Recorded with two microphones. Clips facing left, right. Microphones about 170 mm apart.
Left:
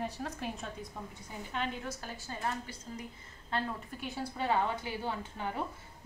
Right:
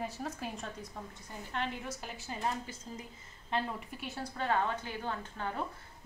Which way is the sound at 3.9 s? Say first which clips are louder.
Left 2 dB; centre (ahead or behind).